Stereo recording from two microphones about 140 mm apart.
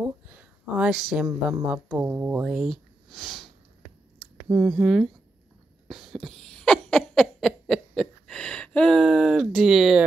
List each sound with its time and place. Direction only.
0.4 s speech: 5° right (ahead or behind)
1.2 s speech: 15° right (ahead or behind); by 3.4 s centre (ahead or behind)
4.5 s speech: 20° right (ahead or behind)
5.9 s a sound: 5° right (ahead or behind)